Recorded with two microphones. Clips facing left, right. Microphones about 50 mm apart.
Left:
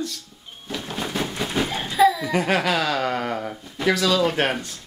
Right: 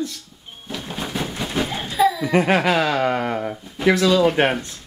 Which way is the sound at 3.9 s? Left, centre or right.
Centre.